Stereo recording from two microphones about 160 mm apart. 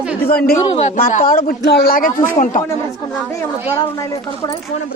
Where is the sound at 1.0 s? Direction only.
55° left (ahead or behind).